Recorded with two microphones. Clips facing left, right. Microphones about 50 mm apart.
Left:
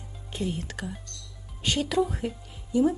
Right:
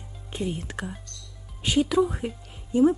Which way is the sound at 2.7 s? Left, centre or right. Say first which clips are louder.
Right 3 dB; right.